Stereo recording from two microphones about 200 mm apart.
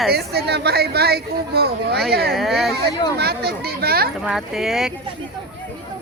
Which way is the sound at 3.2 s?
50° right (ahead or behind).